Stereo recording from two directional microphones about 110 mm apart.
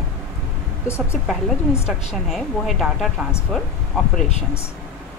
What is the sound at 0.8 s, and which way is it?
Speech, 25° left (ahead or behind).